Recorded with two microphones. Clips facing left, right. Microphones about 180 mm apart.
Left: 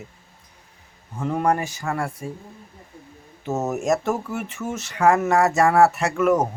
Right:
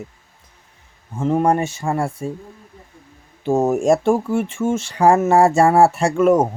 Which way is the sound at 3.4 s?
30° right (ahead or behind).